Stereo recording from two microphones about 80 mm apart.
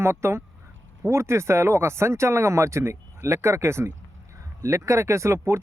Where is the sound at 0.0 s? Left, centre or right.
Right.